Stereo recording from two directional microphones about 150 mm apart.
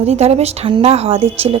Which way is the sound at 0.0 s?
45° right (ahead or behind).